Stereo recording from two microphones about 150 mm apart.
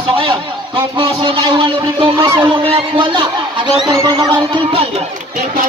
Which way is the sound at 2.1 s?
25° right (ahead or behind).